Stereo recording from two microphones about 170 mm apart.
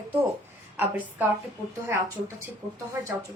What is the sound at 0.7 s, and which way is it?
Speech, 10° right (ahead or behind).